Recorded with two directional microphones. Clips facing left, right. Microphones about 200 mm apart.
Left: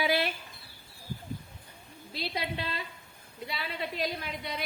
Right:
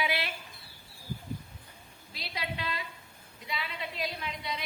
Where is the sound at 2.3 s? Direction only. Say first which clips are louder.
Even; 35° left (ahead or behind).